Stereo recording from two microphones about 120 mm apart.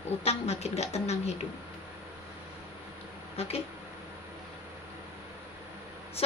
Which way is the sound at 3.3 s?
60° left (ahead or behind).